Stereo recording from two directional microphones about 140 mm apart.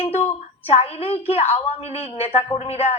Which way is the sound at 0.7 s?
45° left (ahead or behind).